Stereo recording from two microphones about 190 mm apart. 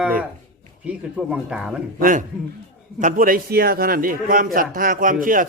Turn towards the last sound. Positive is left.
turn(degrees=-45)  # may be behind; listen again after turning